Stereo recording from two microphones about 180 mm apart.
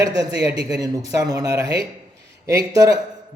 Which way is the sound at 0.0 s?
20° right (ahead or behind).